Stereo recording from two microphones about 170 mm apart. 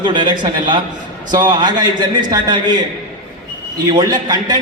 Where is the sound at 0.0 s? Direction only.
30° right (ahead or behind).